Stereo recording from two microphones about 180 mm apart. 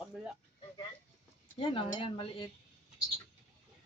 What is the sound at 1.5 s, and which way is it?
Speech, 30° left (ahead or behind).